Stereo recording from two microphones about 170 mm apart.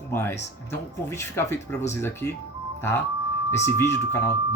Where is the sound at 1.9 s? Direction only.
15° left (ahead or behind).